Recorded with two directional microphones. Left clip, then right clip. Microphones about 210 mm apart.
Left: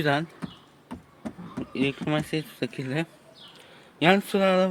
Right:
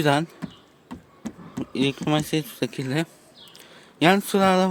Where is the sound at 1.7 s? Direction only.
30° right (ahead or behind).